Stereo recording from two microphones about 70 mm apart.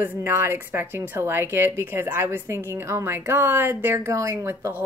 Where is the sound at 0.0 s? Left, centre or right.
Right.